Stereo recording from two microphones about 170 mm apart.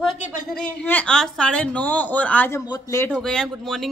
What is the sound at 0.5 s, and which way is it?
Speech, 10° left (ahead or behind).